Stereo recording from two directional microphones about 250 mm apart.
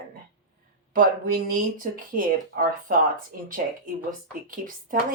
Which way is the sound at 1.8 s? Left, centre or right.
Right.